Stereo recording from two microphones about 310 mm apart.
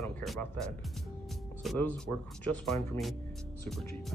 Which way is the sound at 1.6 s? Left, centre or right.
Centre.